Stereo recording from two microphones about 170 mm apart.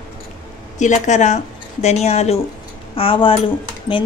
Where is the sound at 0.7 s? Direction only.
45° left (ahead or behind).